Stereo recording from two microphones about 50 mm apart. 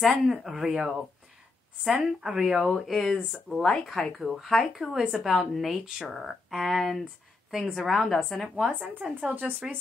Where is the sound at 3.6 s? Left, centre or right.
Centre.